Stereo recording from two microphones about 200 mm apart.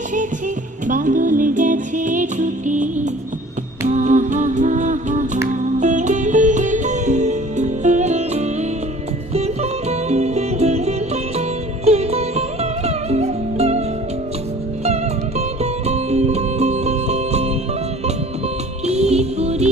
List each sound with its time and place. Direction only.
0.9 s music: 40° right (ahead or behind)
15.4 s music: 30° right (ahead or behind)
18.9 s music: 35° right (ahead or behind)